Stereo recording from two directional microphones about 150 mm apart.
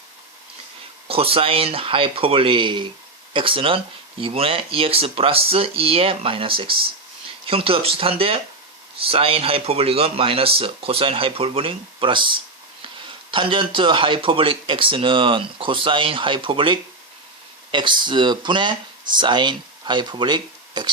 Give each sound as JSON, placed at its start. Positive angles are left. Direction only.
{"t": 1.0, "sound": "speech", "side_deg": -40}